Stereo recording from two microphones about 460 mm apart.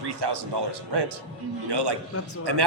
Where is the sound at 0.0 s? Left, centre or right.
Right.